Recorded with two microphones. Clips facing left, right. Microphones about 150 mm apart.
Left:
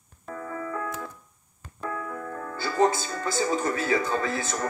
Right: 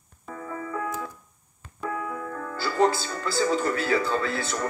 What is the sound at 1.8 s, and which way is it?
Music, 40° left (ahead or behind).